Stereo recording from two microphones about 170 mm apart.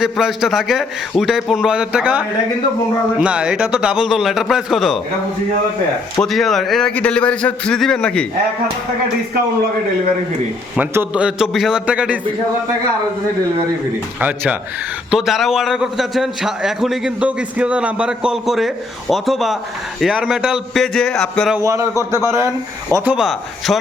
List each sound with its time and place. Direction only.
0.0 s a man's voice: centre (ahead or behind)
6.2 s a man's voice: centre (ahead or behind)
10.8 s a man's voice: 10° right (ahead or behind)
14.2 s a man's voice: 10° right (ahead or behind)
21.6 s a man's voice: 15° right (ahead or behind)
23.1 s a man's voice: centre (ahead or behind)